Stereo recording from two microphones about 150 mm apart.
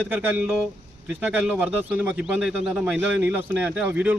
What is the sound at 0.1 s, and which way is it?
Speech, 10° right (ahead or behind).